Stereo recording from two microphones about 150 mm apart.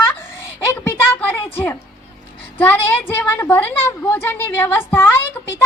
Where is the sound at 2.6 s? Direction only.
10° left (ahead or behind).